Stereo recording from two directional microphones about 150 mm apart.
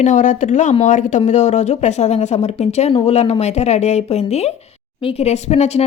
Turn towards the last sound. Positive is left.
turn(degrees=45)  # may be behind; listen again after turning